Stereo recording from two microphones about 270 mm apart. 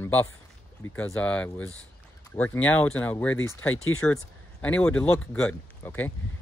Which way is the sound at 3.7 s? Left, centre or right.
Left.